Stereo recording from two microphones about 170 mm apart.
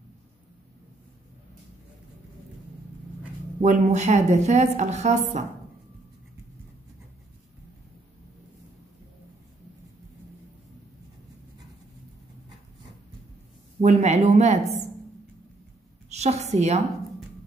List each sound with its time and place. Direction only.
3.6 s a woman's voice: 45° right (ahead or behind)
13.7 s speech: 40° right (ahead or behind)
16.1 s a woman's voice: 40° right (ahead or behind)